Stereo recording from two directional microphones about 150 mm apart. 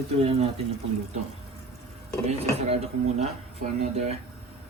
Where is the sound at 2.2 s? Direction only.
45° right (ahead or behind).